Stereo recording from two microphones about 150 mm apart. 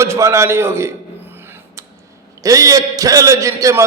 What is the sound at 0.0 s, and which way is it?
Speech, 20° right (ahead or behind).